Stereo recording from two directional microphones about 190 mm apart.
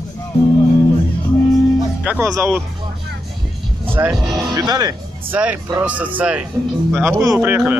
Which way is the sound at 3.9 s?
15° right (ahead or behind).